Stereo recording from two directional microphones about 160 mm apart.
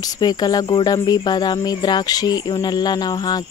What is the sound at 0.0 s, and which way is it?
Speech, 25° left (ahead or behind).